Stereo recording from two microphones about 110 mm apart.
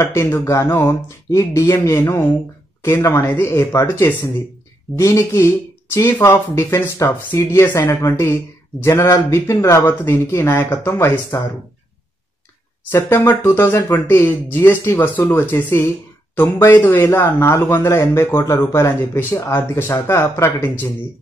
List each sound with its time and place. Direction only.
0.0 s speech: 25° left (ahead or behind)
12.9 s speech: 25° left (ahead or behind)